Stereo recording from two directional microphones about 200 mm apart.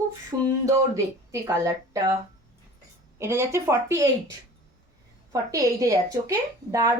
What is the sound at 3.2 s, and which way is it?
Speech, 15° right (ahead or behind).